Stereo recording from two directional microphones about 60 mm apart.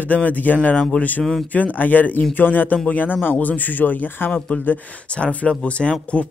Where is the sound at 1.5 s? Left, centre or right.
Left.